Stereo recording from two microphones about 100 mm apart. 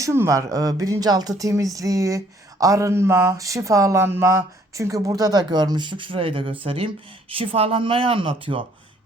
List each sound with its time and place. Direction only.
0.0 s speech: 30° right (ahead or behind); by 8.6 s 60° right (ahead or behind)